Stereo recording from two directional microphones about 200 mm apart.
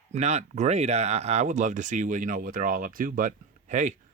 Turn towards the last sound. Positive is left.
turn(degrees=-40)  # may be behind; listen again after turning